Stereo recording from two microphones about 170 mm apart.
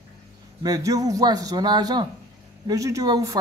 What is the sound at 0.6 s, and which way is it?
A man's voice, 20° right (ahead or behind).